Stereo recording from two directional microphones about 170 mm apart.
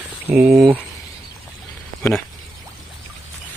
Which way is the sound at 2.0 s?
10° left (ahead or behind).